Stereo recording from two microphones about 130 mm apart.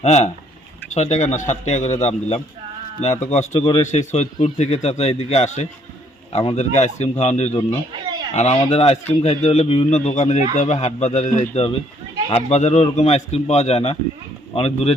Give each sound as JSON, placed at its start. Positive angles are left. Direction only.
{"t": 0.0, "sound": "speech", "side_deg": 60}
{"t": 6.3, "sound": "speech", "side_deg": 40}
{"t": 6.6, "sound": "speech", "side_deg": 60}